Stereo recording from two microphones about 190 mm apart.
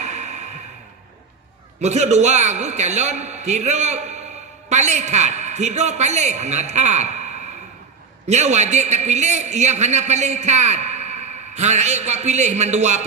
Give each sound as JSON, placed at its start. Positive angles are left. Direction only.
{"t": 0.0, "sound": "music", "side_deg": -35}
{"t": 1.8, "sound": "a man's voice", "side_deg": -35}
{"t": 8.3, "sound": "a man's voice", "side_deg": -35}